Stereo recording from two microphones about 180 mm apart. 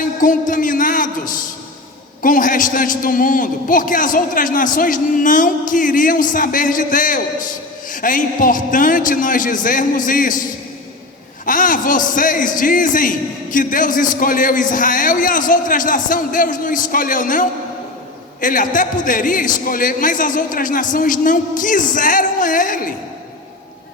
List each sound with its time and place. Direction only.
0.0 s a man's voice: 50° left (ahead or behind)
11.4 s a man's voice: 50° left (ahead or behind)